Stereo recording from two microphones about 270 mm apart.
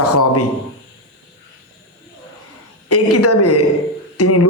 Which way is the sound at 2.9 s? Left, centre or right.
Left.